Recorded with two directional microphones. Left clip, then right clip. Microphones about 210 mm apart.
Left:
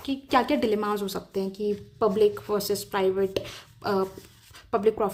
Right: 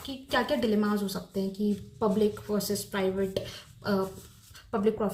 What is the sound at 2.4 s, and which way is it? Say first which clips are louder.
Speech: left 4 dB; 40° left (ahead or behind).